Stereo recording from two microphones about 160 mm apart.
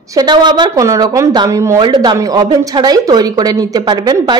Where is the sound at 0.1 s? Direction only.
25° right (ahead or behind).